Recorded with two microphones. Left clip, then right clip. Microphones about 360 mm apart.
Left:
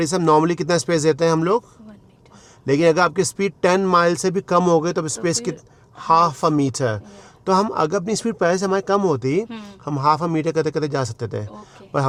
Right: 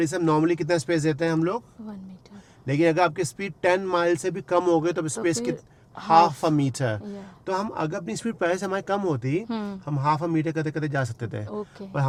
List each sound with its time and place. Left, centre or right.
0.0 s speech: left
2.6 s speech: left
7.4 s speech: left